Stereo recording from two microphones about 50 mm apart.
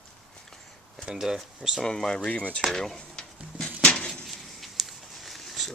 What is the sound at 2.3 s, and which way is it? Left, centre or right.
Speech, left.